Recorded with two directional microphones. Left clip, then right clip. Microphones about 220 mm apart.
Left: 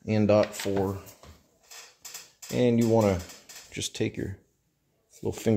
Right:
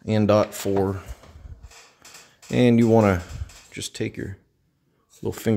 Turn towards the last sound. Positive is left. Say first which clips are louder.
# right 2 dB
turn(degrees=-10)  # may be behind; listen again after turning